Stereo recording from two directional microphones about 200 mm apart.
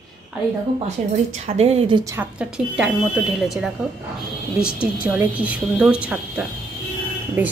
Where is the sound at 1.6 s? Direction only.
30° right (ahead or behind).